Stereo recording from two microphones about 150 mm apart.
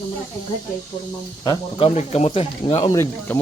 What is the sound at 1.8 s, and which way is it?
Speech, 45° left (ahead or behind).